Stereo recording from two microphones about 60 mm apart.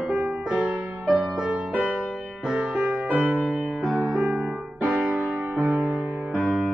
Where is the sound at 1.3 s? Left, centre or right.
Centre.